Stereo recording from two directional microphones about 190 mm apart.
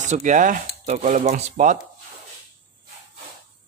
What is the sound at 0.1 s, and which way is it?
Speech, 40° right (ahead or behind).